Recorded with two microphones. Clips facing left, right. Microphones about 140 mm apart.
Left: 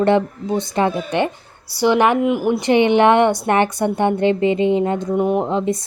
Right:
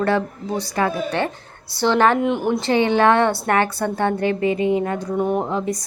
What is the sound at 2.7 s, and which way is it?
A woman's voice, 20° left (ahead or behind).